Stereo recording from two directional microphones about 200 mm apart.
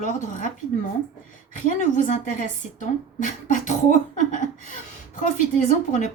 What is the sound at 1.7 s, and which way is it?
A woman's voice, 40° left (ahead or behind).